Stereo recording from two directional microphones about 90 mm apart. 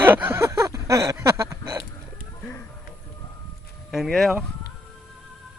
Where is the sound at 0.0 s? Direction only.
20° right (ahead or behind).